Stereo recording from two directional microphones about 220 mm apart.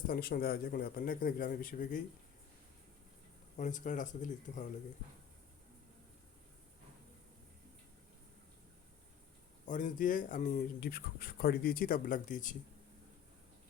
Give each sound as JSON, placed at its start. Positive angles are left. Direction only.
{"t": 0.1, "sound": "speech", "side_deg": 45}
{"t": 3.6, "sound": "speech", "side_deg": 35}
{"t": 9.6, "sound": "speech", "side_deg": 35}